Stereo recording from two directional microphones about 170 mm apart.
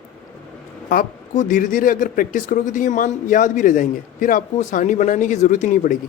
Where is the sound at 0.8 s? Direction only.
50° left (ahead or behind).